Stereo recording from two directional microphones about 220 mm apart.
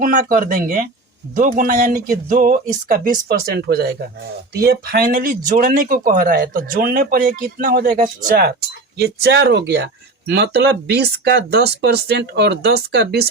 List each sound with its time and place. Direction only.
0.0 s speech: 40° right (ahead or behind)